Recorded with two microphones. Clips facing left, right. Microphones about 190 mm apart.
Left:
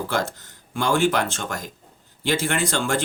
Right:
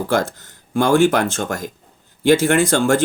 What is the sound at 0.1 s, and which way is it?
Speech, 45° right (ahead or behind).